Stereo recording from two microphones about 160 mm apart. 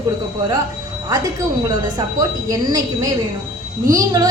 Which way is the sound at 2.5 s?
20° right (ahead or behind).